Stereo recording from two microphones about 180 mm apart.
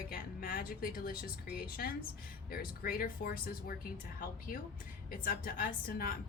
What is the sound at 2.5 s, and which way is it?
A woman's voice, 55° left (ahead or behind).